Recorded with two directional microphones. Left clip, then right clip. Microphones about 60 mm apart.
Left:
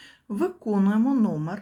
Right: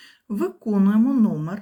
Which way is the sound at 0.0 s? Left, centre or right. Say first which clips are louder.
Right 1 dB; right.